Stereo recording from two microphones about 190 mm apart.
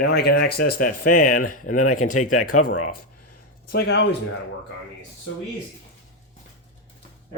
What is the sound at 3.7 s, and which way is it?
Speech, 65° left (ahead or behind).